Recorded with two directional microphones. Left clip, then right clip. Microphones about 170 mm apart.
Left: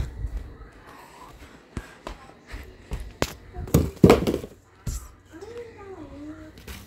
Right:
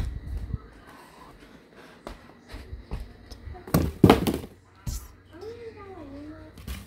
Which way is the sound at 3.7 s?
25° right (ahead or behind).